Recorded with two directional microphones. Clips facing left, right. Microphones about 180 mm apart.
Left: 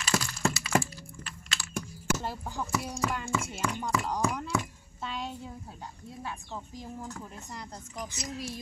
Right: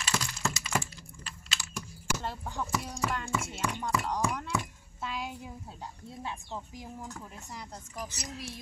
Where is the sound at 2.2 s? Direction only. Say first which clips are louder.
Left 1 dB; 5° left (ahead or behind).